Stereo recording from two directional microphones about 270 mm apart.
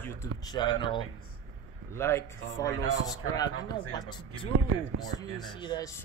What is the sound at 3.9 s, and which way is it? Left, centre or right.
Speech, centre.